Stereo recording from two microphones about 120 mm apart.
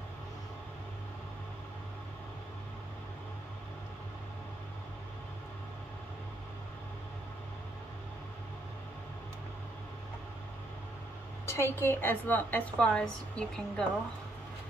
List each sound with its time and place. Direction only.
11.4 s a woman's voice: 20° left (ahead or behind)